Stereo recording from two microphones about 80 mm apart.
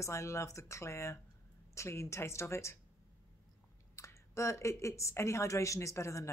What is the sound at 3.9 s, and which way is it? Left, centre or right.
Speech, left.